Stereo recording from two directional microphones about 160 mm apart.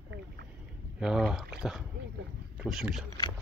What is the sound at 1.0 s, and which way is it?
Rowboat, 5° right (ahead or behind).